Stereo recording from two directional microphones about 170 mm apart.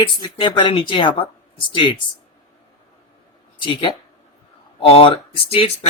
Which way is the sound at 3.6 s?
30° left (ahead or behind).